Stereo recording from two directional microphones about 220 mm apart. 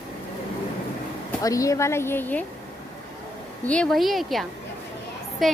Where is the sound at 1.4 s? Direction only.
15° left (ahead or behind).